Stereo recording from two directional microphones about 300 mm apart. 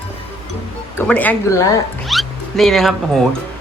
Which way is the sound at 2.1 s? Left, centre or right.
Centre.